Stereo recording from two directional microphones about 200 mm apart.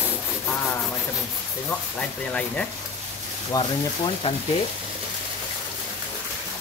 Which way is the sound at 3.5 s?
20° left (ahead or behind).